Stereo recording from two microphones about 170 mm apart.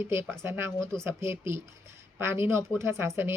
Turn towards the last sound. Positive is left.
turn(degrees=-15)  # may be behind; listen again after turning